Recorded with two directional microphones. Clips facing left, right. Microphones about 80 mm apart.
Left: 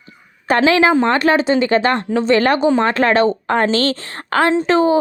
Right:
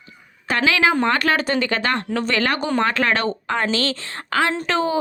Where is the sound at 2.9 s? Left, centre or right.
Left.